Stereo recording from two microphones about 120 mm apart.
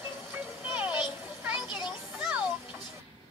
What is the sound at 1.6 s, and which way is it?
Music, 40° left (ahead or behind).